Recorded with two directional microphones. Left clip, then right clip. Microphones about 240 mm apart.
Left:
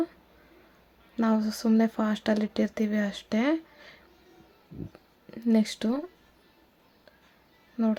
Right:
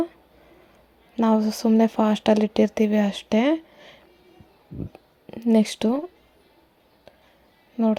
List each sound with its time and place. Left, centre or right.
1.1 s speech: centre
7.8 s speech: centre